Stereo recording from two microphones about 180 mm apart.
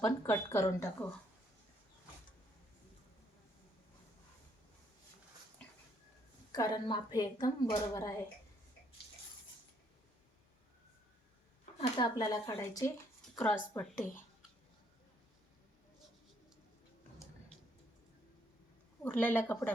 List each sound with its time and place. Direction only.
0.0 s a woman's voice: 15° left (ahead or behind)
5.6 s dog: 5° left (ahead or behind)
6.5 s a woman's voice: 25° left (ahead or behind)
11.8 s a woman's voice: 25° left (ahead or behind)
13.4 s a woman's voice: 10° left (ahead or behind)
19.0 s a woman's voice: 10° left (ahead or behind)